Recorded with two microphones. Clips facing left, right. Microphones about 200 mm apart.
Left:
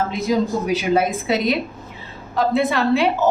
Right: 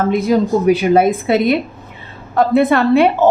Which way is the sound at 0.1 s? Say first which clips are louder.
Right 6 dB; 55° right (ahead or behind).